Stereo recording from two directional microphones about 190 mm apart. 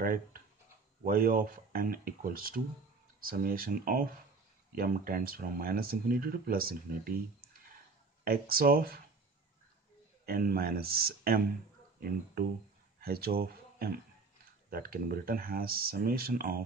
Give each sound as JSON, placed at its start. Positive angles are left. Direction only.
{"t": 0.0, "sound": "speech", "side_deg": -50}
{"t": 8.2, "sound": "speech", "side_deg": -50}
{"t": 10.2, "sound": "speech", "side_deg": -50}
{"t": 13.0, "sound": "speech", "side_deg": -55}